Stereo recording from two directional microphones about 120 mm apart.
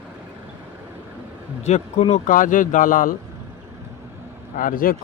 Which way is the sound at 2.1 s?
90° left.